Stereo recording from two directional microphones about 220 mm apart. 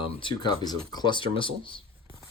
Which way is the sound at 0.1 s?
20° left (ahead or behind).